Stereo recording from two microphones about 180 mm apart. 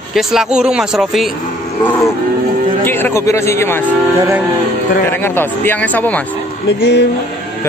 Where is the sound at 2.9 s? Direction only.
10° left (ahead or behind).